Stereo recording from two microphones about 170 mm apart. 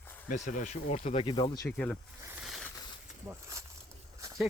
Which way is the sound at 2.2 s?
10° right (ahead or behind).